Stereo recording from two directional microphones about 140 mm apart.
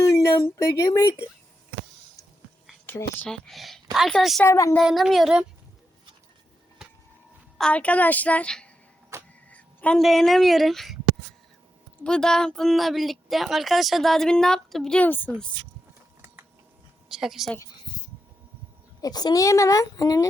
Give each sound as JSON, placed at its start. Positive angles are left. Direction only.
{"t": 0.0, "sound": "speech", "side_deg": 20}
{"t": 2.8, "sound": "a woman's voice", "side_deg": 15}
{"t": 4.4, "sound": "speech", "side_deg": 20}
{"t": 4.8, "sound": "a woman's voice", "side_deg": 0}
{"t": 7.6, "sound": "a woman's voice", "side_deg": 10}
{"t": 9.1, "sound": "vehicle", "side_deg": -20}
{"t": 9.5, "sound": "a sound", "side_deg": 10}
{"t": 10.0, "sound": "a woman's voice", "side_deg": 0}
{"t": 12.0, "sound": "a woman's voice", "side_deg": 5}
{"t": 16.2, "sound": "mechanisms", "side_deg": -15}
{"t": 17.1, "sound": "a woman's voice", "side_deg": -5}
{"t": 19.0, "sound": "speech", "side_deg": 25}